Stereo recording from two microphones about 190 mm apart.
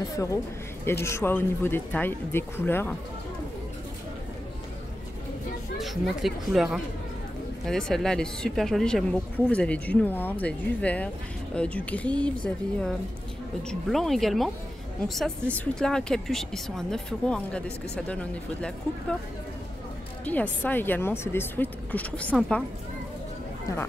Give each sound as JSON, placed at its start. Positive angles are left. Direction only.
{"t": 0.1, "sound": "speech", "side_deg": 15}
{"t": 5.8, "sound": "speech", "side_deg": 0}
{"t": 13.6, "sound": "speech", "side_deg": 0}
{"t": 20.3, "sound": "speech", "side_deg": 10}